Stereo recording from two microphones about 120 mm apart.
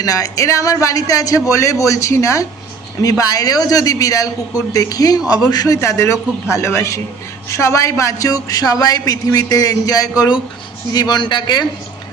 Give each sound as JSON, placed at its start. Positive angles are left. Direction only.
{"t": 0.0, "sound": "a man's voice", "side_deg": 30}